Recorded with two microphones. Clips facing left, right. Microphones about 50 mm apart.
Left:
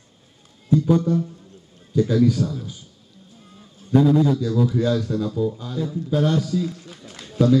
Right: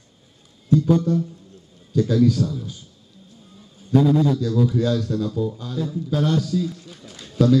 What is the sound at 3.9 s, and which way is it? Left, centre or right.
A man's voice, centre.